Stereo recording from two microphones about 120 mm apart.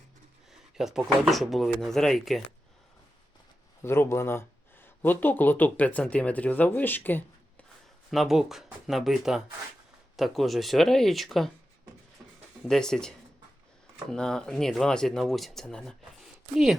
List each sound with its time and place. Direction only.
0.8 s speech: 5° right (ahead or behind)
3.8 s speech: 20° left (ahead or behind)
8.1 s speech: centre (ahead or behind)
12.6 s speech: 5° left (ahead or behind)